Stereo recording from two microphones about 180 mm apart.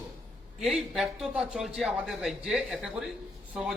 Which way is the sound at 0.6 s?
Centre (ahead or behind).